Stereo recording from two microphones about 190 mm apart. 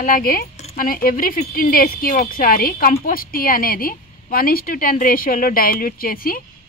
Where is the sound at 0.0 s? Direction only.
50° left (ahead or behind).